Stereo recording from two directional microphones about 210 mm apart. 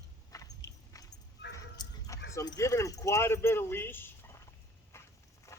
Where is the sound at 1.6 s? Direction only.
15° left (ahead or behind).